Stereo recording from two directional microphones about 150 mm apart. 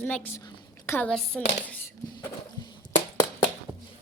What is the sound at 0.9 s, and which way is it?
Speech, 5° left (ahead or behind).